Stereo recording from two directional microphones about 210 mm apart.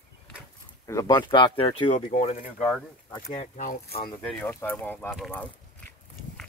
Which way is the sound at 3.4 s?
40° left (ahead or behind).